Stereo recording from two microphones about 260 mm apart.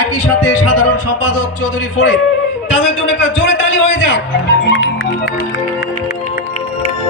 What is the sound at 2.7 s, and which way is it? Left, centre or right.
A man's voice, left.